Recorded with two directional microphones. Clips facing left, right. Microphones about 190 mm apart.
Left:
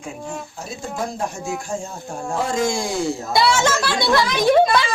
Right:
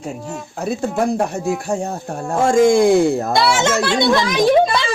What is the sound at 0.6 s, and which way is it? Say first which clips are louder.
Speech: right 10 dB; 65° right (ahead or behind).